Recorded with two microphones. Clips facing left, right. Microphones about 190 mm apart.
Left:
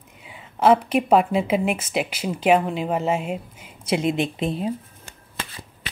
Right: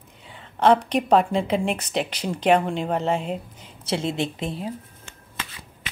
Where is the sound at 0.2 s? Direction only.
10° left (ahead or behind).